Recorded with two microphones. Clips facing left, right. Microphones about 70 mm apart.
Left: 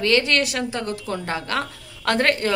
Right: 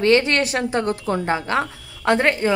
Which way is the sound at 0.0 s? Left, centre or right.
Right.